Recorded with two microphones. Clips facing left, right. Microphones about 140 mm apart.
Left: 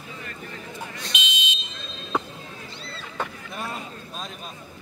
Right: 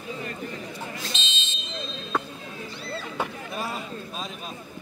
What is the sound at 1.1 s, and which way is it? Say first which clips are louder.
Smoke detector: left 4 dB; 15° left (ahead or behind).